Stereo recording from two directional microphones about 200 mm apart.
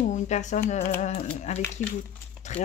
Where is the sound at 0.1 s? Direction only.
35° left (ahead or behind).